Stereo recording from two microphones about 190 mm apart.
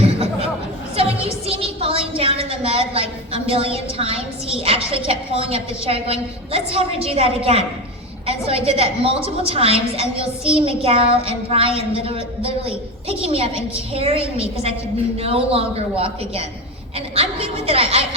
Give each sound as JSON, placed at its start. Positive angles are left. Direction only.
{"t": 0.9, "sound": "a woman's voice", "side_deg": -30}